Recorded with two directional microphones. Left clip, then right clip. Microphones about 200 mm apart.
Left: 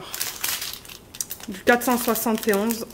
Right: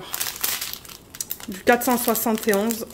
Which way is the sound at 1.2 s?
5° right (ahead or behind).